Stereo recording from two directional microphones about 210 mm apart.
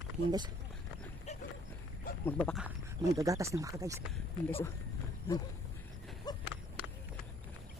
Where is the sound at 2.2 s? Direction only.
5° left (ahead or behind).